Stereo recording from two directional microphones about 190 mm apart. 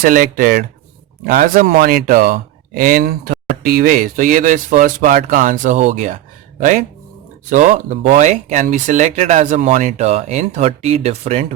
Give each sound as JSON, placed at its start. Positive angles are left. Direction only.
{"t": 0.0, "sound": "speech", "side_deg": -45}
{"t": 7.5, "sound": "speech", "side_deg": -40}